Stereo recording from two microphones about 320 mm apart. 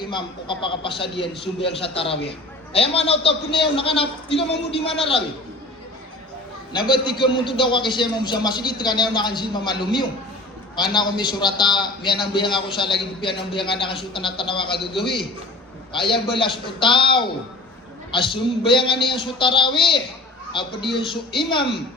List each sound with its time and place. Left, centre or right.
0.0 s a man's voice: centre
6.7 s a man's voice: centre
18.7 s a man's voice: centre